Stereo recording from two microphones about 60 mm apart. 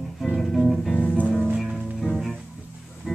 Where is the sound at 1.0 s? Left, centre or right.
Left.